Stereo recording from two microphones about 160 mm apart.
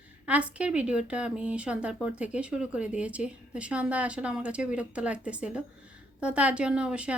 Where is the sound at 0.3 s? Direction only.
10° right (ahead or behind).